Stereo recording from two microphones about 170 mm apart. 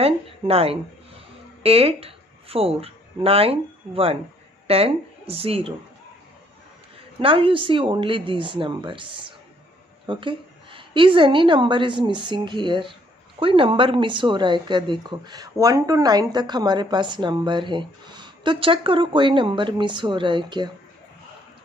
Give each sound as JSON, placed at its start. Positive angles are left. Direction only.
{"t": 0.0, "sound": "speech", "side_deg": -35}
{"t": 7.2, "sound": "a woman's voice", "side_deg": -30}